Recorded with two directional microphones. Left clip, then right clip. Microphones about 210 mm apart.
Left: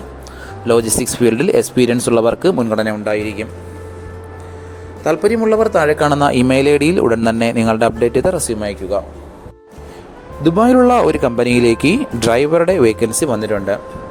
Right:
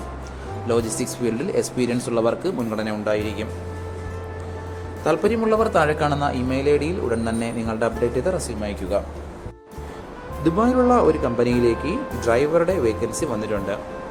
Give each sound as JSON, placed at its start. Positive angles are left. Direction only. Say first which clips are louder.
{"t": 0.7, "sound": "speech", "louder": "left 9 dB", "side_deg": 40}
{"t": 2.9, "sound": "speech", "louder": "left 5 dB", "side_deg": 20}
{"t": 5.0, "sound": "speech", "louder": "left 6 dB", "side_deg": 20}
{"t": 6.0, "sound": "speech", "louder": "left 9 dB", "side_deg": 40}
{"t": 10.4, "sound": "speech", "louder": "left 8 dB", "side_deg": 40}